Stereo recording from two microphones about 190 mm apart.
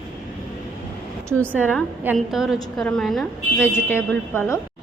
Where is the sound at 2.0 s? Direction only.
5° right (ahead or behind); by 4.6 s 10° left (ahead or behind).